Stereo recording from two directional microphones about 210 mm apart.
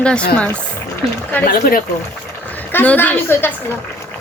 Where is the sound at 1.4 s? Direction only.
45° left (ahead or behind).